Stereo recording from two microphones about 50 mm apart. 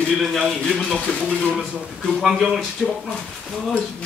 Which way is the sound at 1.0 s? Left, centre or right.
Centre.